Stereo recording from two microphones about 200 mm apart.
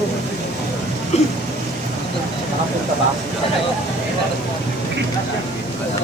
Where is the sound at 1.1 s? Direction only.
35° left (ahead or behind).